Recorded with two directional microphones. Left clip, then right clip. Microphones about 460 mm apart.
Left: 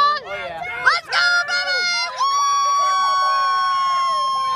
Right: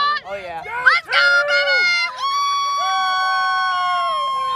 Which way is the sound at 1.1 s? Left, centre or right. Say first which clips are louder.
Right 3 dB; centre.